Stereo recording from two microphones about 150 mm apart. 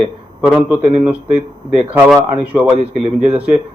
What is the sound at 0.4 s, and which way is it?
A man's voice, 10° right (ahead or behind).